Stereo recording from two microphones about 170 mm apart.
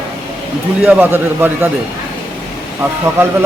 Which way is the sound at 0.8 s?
10° right (ahead or behind).